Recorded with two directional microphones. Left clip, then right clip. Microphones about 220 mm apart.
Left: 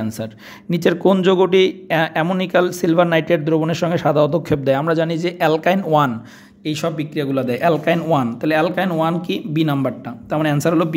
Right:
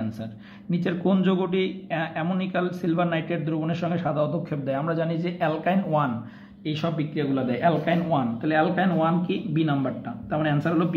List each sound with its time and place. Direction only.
0.2 s speech: 50° left (ahead or behind)